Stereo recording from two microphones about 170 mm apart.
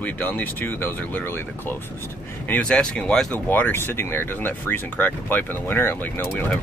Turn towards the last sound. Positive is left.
turn(degrees=10)  # may be behind; listen again after turning